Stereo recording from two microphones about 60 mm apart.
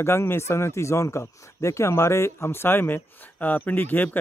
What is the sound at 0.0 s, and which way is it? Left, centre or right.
Speech, left.